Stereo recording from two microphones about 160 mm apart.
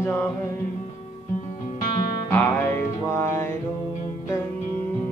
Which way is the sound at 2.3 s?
15° left (ahead or behind).